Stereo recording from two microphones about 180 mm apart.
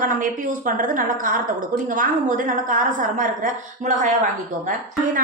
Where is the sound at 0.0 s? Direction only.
50° right (ahead or behind).